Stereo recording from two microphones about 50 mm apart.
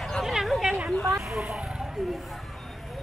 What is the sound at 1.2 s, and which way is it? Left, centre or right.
Vehicle, centre.